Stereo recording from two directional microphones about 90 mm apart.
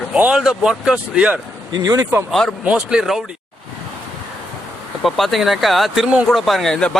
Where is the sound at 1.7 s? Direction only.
45° right (ahead or behind).